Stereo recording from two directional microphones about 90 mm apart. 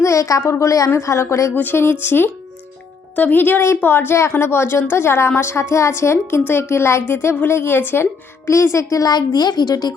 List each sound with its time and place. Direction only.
0.0 s a woman's voice: 35° left (ahead or behind)
8.4 s a child's voice: 35° left (ahead or behind)